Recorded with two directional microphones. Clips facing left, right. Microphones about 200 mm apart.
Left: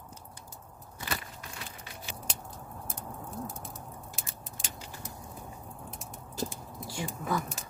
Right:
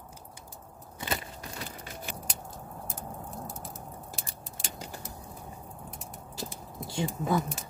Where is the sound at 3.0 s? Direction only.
Centre (ahead or behind).